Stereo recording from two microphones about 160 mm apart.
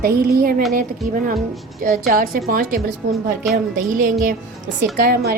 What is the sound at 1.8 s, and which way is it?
Music, 60° right (ahead or behind).